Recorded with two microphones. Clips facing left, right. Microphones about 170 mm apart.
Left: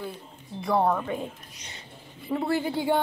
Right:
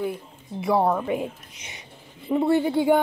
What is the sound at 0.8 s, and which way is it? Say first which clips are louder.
A woman's voice: right 3 dB; 15° right (ahead or behind).